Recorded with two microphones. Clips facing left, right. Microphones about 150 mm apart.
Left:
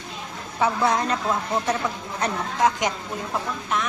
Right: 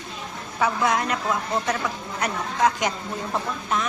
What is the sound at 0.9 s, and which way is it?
Speech, 30° left (ahead or behind).